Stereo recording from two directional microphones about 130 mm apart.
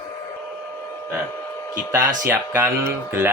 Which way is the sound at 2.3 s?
15° right (ahead or behind).